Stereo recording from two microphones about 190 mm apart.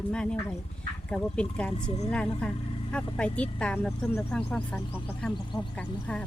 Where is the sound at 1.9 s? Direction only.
30° left (ahead or behind).